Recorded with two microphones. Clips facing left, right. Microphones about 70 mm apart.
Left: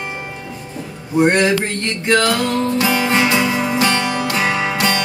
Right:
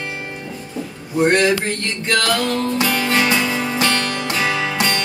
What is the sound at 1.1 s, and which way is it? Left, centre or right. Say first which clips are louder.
Music: left 1 dB; centre.